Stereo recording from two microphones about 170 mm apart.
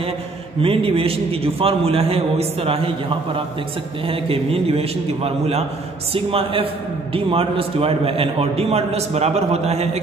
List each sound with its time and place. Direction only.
0.6 s a man's voice: 30° right (ahead or behind)